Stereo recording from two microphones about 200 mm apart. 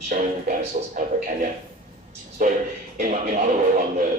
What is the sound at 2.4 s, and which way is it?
Speech, 40° right (ahead or behind).